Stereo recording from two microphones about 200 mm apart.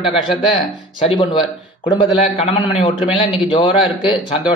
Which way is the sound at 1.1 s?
25° left (ahead or behind).